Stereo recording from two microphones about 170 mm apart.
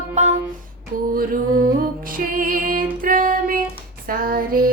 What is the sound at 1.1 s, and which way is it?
Music, 55° right (ahead or behind).